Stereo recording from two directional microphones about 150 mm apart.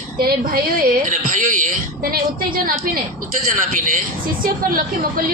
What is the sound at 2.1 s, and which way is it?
Speech, 75° right (ahead or behind).